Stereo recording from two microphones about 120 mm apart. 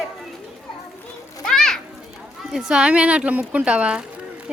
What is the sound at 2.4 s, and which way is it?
Speech, 5° right (ahead or behind).